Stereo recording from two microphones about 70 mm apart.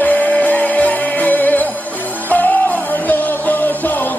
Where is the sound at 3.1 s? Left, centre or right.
Left.